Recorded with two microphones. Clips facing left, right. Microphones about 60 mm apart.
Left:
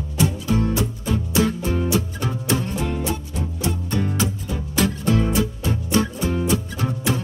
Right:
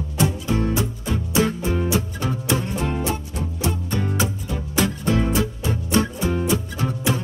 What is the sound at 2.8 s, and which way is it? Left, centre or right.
Music, right.